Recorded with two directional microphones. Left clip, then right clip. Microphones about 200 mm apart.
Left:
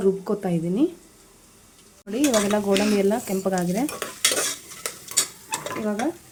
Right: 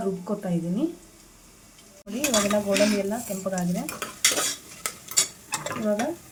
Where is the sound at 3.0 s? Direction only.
50° left (ahead or behind).